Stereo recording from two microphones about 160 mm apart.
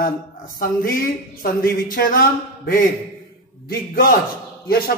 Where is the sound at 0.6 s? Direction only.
65° left (ahead or behind).